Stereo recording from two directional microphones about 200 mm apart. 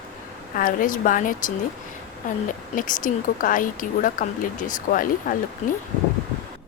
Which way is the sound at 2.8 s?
40° left (ahead or behind).